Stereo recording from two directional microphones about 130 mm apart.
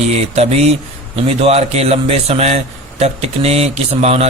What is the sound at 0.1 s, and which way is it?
A man's voice, 55° right (ahead or behind).